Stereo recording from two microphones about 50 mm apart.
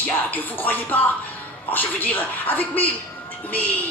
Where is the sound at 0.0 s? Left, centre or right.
Left.